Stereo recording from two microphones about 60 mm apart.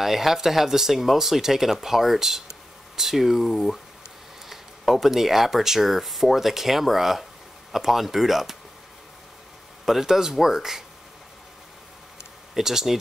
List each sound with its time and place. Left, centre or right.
0.0 s speech: centre
9.8 s speech: centre
12.5 s speech: centre